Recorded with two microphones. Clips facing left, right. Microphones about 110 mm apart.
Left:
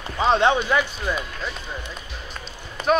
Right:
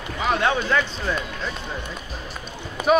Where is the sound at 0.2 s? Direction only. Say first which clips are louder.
Left 4 dB; 25° left (ahead or behind); by 1.5 s 5° left (ahead or behind).